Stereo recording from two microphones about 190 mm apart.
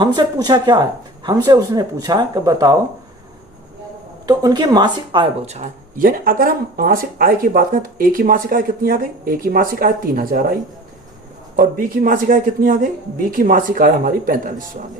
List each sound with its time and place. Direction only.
0.0 s speech: 25° right (ahead or behind)
4.3 s speech: 20° right (ahead or behind); by 10.4 s 50° right (ahead or behind)
11.8 s speech: 45° right (ahead or behind)